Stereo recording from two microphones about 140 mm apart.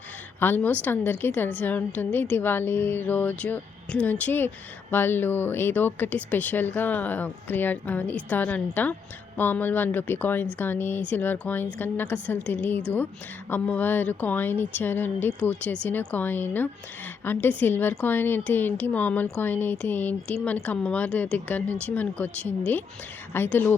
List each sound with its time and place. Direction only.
0.3 s a woman's voice: 15° left (ahead or behind)